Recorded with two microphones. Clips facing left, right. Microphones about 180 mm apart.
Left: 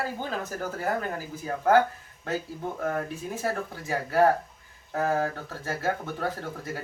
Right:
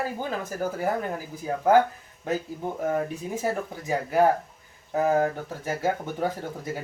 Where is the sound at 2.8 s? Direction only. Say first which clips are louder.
Right 4 dB; 15° right (ahead or behind).